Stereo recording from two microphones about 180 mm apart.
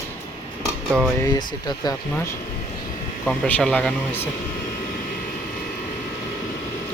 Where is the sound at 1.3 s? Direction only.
25° left (ahead or behind).